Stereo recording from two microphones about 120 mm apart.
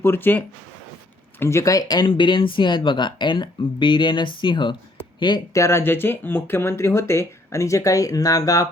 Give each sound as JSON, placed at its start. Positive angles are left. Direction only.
{"t": 0.0, "sound": "speech", "side_deg": 20}
{"t": 5.5, "sound": "speech", "side_deg": 25}